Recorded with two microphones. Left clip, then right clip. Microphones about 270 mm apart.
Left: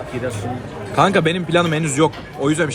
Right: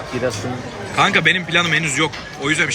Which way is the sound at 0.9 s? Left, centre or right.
Centre.